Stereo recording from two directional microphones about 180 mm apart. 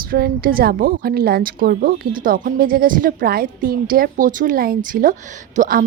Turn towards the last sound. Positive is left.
turn(degrees=-45)  # may be behind; listen again after turning